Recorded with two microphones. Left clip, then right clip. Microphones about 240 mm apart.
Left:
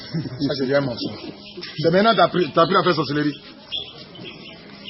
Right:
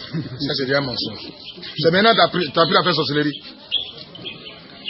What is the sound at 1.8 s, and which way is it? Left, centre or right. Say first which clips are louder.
Speech: right 2 dB; centre.